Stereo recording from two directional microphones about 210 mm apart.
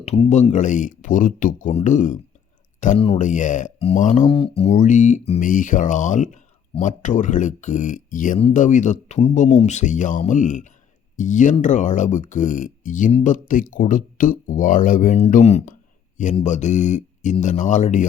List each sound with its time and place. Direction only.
0.0 s speech: 30° left (ahead or behind)